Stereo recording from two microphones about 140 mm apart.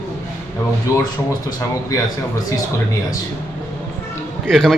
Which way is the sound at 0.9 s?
25° left (ahead or behind).